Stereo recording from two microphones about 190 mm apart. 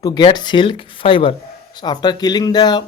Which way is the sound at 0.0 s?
20° left (ahead or behind).